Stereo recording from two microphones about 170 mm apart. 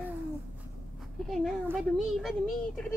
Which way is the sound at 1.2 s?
Centre (ahead or behind).